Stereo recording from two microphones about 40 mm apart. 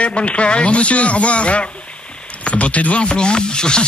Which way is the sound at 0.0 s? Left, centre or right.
Left.